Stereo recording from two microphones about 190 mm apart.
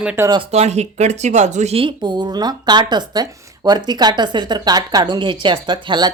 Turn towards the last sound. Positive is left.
turn(degrees=-25)  # may be behind; listen again after turning